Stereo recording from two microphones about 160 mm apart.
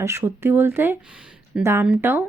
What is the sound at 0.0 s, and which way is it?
Speech, 20° right (ahead or behind).